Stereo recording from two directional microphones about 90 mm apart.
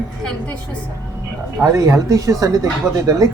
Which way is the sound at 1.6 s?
40° right (ahead or behind).